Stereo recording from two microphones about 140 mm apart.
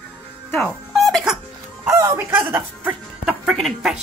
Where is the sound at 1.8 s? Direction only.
20° right (ahead or behind); by 4.0 s centre (ahead or behind).